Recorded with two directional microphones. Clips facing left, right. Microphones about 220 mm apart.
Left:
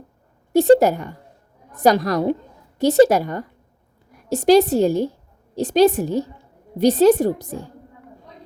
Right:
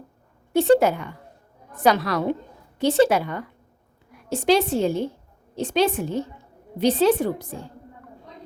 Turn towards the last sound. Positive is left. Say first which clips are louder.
# left 4 dB
turn(degrees=40)  # may be behind; listen again after turning